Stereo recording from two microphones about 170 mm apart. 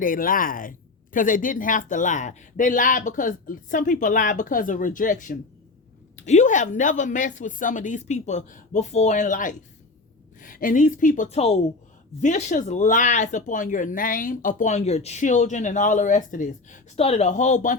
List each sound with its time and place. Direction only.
0.0 s speech: 55° left (ahead or behind)